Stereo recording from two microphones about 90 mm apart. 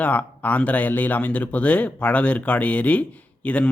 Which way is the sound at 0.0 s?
15° left (ahead or behind).